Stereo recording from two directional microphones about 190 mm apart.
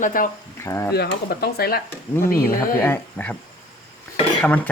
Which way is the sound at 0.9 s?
55° left (ahead or behind).